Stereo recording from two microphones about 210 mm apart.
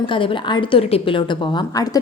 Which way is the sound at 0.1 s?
25° left (ahead or behind).